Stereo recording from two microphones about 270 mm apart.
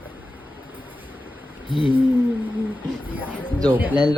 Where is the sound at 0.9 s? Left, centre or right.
Centre.